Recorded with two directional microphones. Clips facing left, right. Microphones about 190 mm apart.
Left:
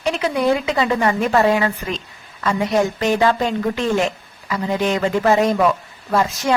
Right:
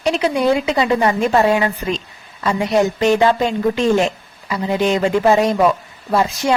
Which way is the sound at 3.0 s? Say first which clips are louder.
Right 3 dB; 25° right (ahead or behind).